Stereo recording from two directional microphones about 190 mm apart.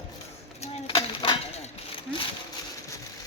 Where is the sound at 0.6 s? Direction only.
30° left (ahead or behind).